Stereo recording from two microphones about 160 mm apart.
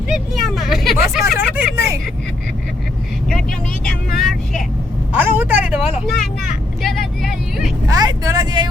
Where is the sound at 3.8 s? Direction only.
Centre (ahead or behind).